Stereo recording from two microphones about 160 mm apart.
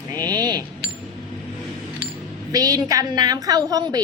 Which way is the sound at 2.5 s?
20° right (ahead or behind).